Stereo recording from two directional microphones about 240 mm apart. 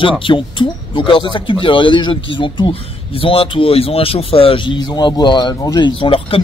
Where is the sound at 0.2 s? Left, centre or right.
Centre.